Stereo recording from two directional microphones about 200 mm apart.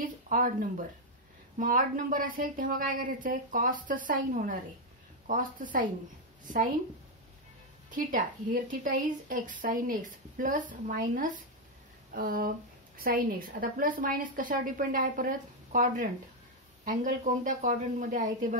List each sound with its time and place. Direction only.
0.0 s a woman's voice: 45° right (ahead or behind)
7.9 s a woman's voice: 40° right (ahead or behind)